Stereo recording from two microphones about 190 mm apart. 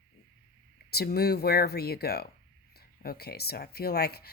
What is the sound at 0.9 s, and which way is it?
Speech, 55° left (ahead or behind).